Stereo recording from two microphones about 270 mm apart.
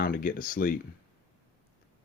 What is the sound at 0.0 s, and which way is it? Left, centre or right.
Speech, left.